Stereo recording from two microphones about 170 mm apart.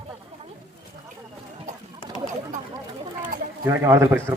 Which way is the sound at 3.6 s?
15° right (ahead or behind).